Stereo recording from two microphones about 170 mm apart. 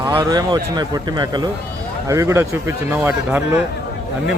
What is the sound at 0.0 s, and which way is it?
Speech, 25° right (ahead or behind).